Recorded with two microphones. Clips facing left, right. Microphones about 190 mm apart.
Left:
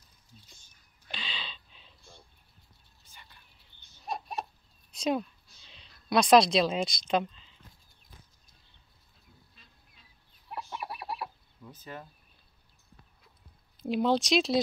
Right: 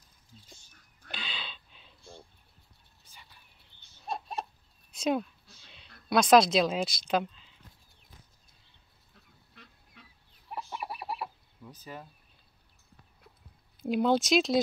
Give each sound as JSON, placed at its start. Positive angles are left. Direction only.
{"t": 1.1, "sound": "a sound", "side_deg": -5}
{"t": 4.0, "sound": "chicken", "side_deg": 0}
{"t": 4.9, "sound": "a woman's voice", "side_deg": 0}
{"t": 9.6, "sound": "goose", "side_deg": -70}
{"t": 10.0, "sound": "a sound", "side_deg": -70}
{"t": 10.5, "sound": "chicken", "side_deg": 0}
{"t": 11.7, "sound": "speech", "side_deg": -10}
{"t": 13.8, "sound": "a woman's voice", "side_deg": 0}